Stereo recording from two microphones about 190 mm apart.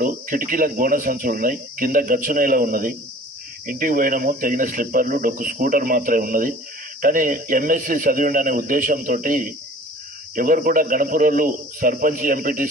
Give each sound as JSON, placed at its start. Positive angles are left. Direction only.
{"t": 0.0, "sound": "speech", "side_deg": -45}